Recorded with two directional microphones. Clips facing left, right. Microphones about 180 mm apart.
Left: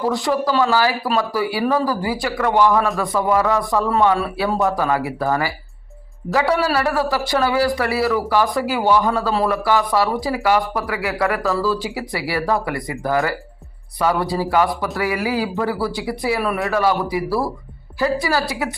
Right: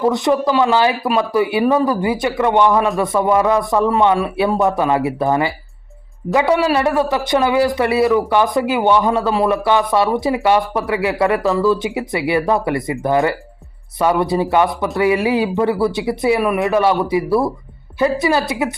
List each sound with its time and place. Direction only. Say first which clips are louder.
0.0 s a man's voice: right 4 dB; 20° right (ahead or behind)